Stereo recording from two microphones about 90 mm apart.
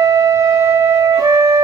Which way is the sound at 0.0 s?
35° right (ahead or behind).